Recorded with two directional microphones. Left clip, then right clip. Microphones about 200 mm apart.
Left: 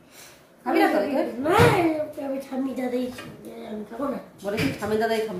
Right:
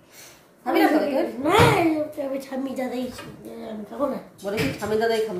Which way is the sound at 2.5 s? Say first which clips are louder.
Even; 60° right (ahead or behind).